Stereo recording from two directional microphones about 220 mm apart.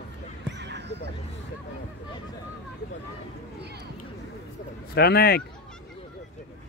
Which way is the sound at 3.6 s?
50° right (ahead or behind).